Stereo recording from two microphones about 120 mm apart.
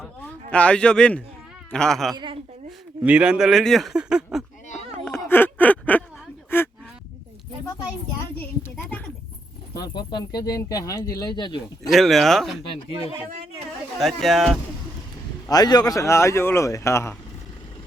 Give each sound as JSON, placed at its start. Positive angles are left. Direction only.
{"t": 0.0, "sound": "a sound", "side_deg": 10}
{"t": 1.7, "sound": "speech", "side_deg": 5}
{"t": 2.1, "sound": "a woman's voice", "side_deg": -45}
{"t": 3.0, "sound": "speech", "side_deg": -10}
{"t": 5.0, "sound": "a sound", "side_deg": 15}
{"t": 6.5, "sound": "quack", "side_deg": 20}
{"t": 8.8, "sound": "a sound", "side_deg": 15}
{"t": 9.7, "sound": "speech", "side_deg": 35}
{"t": 11.9, "sound": "speech", "side_deg": 0}
{"t": 14.0, "sound": "speech", "side_deg": 0}
{"t": 15.4, "sound": "speech", "side_deg": 35}